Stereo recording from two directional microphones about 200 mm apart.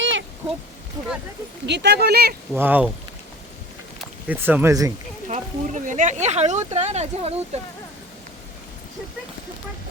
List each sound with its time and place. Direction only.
0.0 s a sound: 70° right (ahead or behind)
1.6 s speech: 60° right (ahead or behind)
2.5 s speech: 10° right (ahead or behind)
4.3 s speech: 10° right (ahead or behind)
5.3 s speech: 40° right (ahead or behind)